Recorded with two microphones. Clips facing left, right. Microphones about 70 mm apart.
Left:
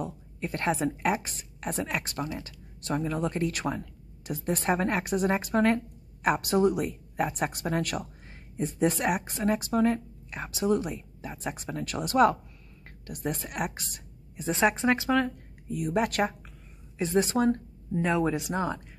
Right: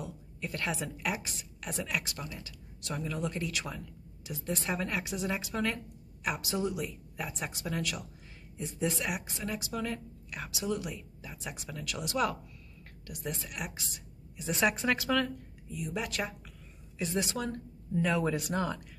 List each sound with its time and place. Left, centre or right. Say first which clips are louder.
0.0 s a woman's voice: left 6 dB; left
14.5 s speech: left 5 dB; left
15.7 s speech: left 9 dB; left